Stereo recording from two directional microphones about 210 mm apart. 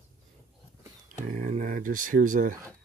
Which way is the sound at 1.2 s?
40° right (ahead or behind).